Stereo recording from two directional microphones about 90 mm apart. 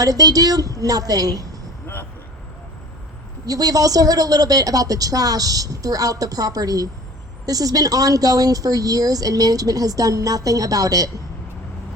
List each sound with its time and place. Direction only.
0.0 s a woman's voice: 45° right (ahead or behind)
3.4 s a woman's voice: 45° right (ahead or behind)